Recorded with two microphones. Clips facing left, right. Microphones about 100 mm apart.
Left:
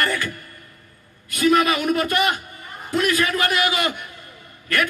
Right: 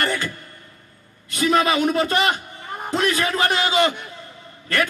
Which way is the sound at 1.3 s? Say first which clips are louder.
Left 1 dB; 25° right (ahead or behind).